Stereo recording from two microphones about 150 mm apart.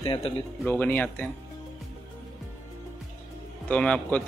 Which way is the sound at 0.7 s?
10° left (ahead or behind).